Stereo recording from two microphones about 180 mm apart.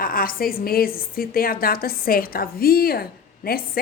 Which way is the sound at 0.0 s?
50° left (ahead or behind).